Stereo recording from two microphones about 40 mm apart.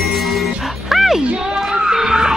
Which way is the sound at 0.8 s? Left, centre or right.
Centre.